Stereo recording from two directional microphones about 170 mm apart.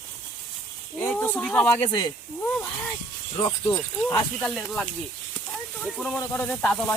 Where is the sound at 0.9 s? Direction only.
15° left (ahead or behind).